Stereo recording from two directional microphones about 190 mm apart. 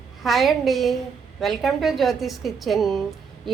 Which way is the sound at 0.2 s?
Centre (ahead or behind).